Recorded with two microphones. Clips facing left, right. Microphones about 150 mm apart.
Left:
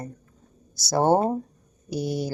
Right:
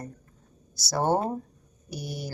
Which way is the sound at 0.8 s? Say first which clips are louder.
Left 5 dB; 20° left (ahead or behind).